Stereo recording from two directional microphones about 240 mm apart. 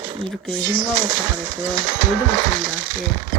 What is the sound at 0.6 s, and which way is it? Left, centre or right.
Speech, centre.